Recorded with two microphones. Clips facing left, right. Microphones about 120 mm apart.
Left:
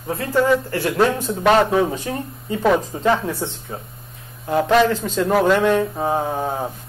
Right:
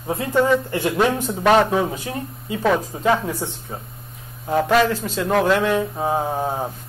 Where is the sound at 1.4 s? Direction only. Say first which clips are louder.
Left 1 dB; centre (ahead or behind).